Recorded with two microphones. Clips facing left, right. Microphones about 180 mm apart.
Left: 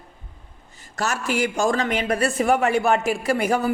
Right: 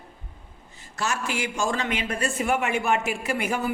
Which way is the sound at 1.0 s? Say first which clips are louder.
Left 5 dB; 40° left (ahead or behind).